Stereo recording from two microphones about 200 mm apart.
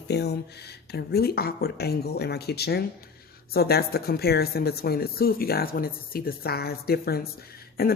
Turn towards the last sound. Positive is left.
turn(degrees=50)  # may be behind; listen again after turning